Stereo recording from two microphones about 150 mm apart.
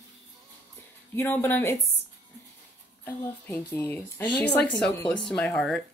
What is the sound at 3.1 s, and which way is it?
Speech, 15° left (ahead or behind).